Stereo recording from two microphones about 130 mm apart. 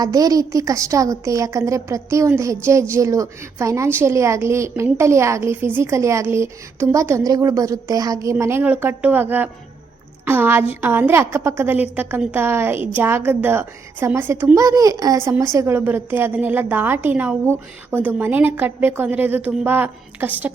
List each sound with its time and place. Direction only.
0.0 s a woman's voice: 30° right (ahead or behind); by 20.5 s 15° right (ahead or behind)